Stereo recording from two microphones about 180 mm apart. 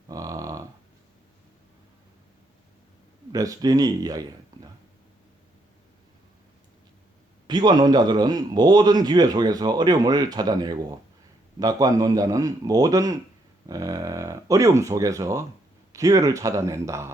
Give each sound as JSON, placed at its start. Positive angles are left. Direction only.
{"t": 0.1, "sound": "a sound", "side_deg": -20}
{"t": 3.3, "sound": "a man's voice", "side_deg": -20}
{"t": 7.4, "sound": "a man's voice", "side_deg": -25}